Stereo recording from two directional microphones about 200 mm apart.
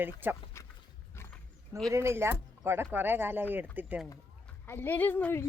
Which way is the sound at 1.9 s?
15° right (ahead or behind).